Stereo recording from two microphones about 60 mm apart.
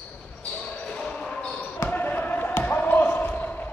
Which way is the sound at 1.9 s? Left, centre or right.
Left.